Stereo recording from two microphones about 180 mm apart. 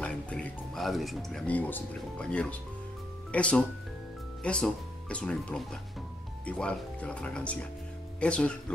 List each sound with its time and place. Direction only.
0.0 s speech: 5° left (ahead or behind)